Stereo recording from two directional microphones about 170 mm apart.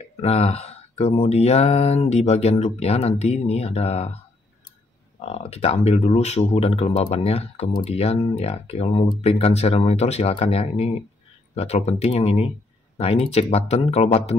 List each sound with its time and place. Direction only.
0.2 s speech: 35° left (ahead or behind)
5.5 s speech: 35° left (ahead or behind)